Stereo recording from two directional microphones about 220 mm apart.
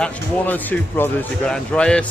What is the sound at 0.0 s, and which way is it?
Speech, 5° left (ahead or behind).